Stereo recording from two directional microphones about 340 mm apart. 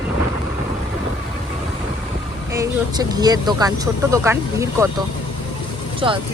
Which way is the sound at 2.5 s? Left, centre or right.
Centre.